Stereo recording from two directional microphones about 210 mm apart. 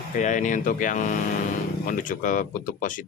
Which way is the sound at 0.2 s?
35° left (ahead or behind).